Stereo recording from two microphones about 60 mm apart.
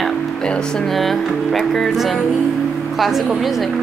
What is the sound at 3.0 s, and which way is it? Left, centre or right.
Speech, centre.